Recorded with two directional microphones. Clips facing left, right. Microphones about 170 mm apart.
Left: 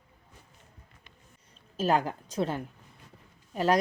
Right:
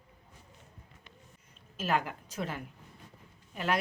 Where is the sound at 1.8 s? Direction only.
35° left (ahead or behind).